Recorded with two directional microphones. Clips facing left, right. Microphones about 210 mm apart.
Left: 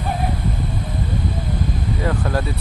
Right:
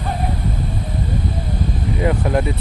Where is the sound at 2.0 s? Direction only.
20° right (ahead or behind).